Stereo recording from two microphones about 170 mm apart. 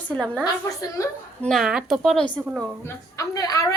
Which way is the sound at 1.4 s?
Centre (ahead or behind).